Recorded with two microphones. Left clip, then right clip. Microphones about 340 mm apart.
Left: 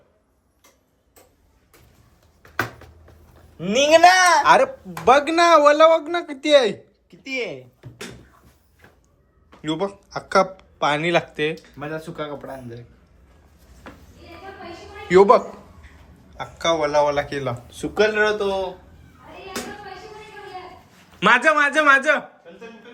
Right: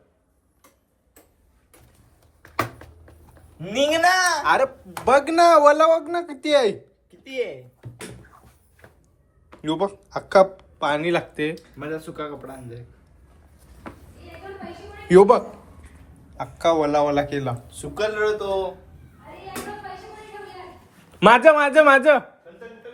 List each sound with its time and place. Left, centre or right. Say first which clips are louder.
3.7 s speech: left 6 dB; left
4.4 s speech: left 4 dB; centre
9.6 s speech: right 1 dB; centre
15.0 s speech: even; centre
17.7 s speech: left 9 dB; left
21.2 s a man's voice: right 3 dB; centre